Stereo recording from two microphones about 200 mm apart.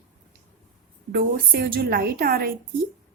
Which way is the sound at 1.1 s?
45° right (ahead or behind).